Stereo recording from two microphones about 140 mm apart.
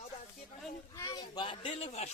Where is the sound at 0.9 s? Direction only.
25° left (ahead or behind).